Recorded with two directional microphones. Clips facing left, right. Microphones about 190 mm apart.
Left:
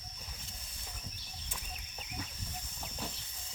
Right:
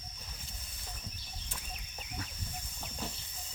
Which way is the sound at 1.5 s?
Centre (ahead or behind).